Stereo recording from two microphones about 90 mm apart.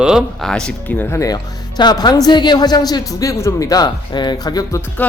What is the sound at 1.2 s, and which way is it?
Speech, 50° left (ahead or behind).